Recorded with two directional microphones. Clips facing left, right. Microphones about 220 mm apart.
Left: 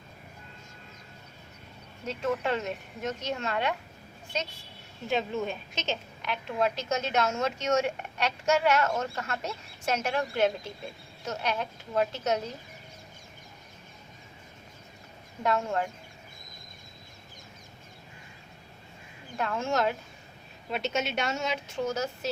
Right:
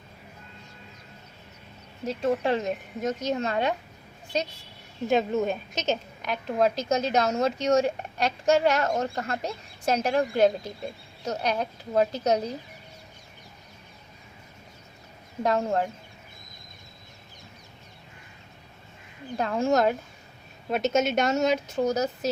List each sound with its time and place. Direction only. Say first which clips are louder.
2.0 s a woman's voice: right 4 dB; 35° right (ahead or behind)
5.0 s a woman's voice: right 6 dB; 45° right (ahead or behind)
15.4 s a woman's voice: right 3 dB; 35° right (ahead or behind)
19.4 s a woman's voice: right 5 dB; 35° right (ahead or behind)